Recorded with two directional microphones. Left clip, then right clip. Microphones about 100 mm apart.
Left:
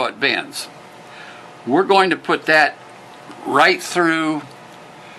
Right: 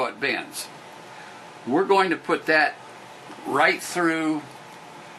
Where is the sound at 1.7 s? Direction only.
30° left (ahead or behind).